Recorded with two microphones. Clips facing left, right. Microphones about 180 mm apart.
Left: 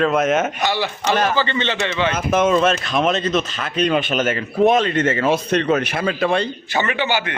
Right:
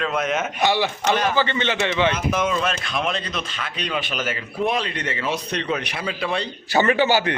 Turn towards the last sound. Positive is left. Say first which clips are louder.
# right 3 dB
turn(degrees=-40)  # may be behind; listen again after turning